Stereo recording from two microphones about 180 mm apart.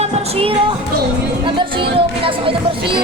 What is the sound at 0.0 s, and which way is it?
Music, 35° right (ahead or behind).